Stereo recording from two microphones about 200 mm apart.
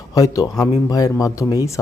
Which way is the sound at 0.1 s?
15° left (ahead or behind).